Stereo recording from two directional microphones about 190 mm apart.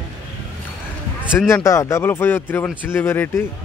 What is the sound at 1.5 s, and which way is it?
Speech, 15° left (ahead or behind).